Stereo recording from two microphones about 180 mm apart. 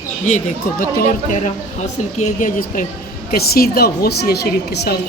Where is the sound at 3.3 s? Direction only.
60° left (ahead or behind).